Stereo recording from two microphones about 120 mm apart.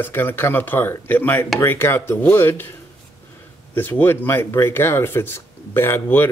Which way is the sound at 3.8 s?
15° left (ahead or behind).